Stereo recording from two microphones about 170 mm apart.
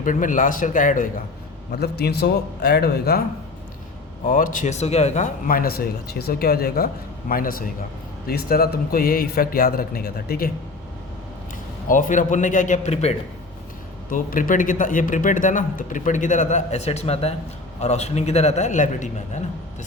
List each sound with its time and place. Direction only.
0.0 s speech: 50° left (ahead or behind)
1.7 s a man's voice: 70° left (ahead or behind)
4.3 s speech: 50° left (ahead or behind)
11.9 s speech: 50° left (ahead or behind)
14.1 s a man's voice: 55° left (ahead or behind)